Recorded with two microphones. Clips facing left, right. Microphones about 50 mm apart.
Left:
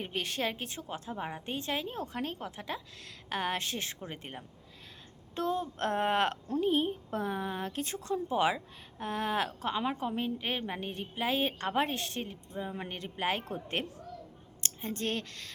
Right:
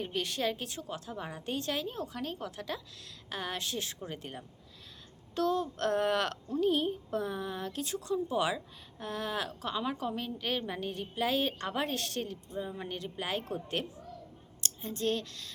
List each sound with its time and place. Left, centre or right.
0.0 s a woman's voice: left
3.2 s a woman's voice: left
12.7 s speech: left